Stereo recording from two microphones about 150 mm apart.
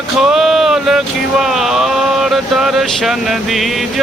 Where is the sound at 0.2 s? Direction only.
Centre (ahead or behind).